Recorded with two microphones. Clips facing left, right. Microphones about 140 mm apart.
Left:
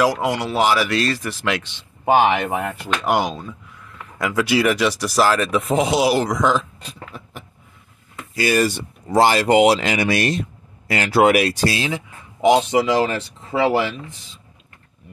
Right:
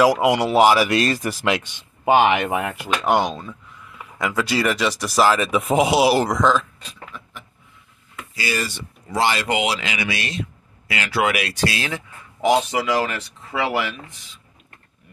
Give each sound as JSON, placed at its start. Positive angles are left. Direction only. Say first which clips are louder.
{"t": 0.0, "sound": "speech", "louder": "right 3 dB", "side_deg": -10}
{"t": 3.0, "sound": "speech", "louder": "right 1 dB", "side_deg": 5}
{"t": 7.1, "sound": "a sound", "louder": "left 2 dB", "side_deg": 40}
{"t": 8.4, "sound": "speech", "louder": "left 8 dB", "side_deg": 50}
{"t": 11.8, "sound": "speech", "louder": "left 4 dB", "side_deg": 20}